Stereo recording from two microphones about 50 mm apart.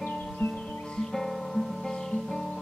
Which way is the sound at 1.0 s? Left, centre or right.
Centre.